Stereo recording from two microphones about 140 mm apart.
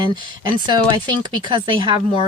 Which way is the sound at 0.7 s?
30° right (ahead or behind).